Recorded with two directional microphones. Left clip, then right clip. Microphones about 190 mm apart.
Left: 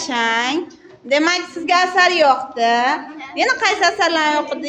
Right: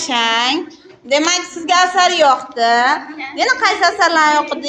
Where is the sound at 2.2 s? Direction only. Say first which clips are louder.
Right 2 dB; 20° left (ahead or behind).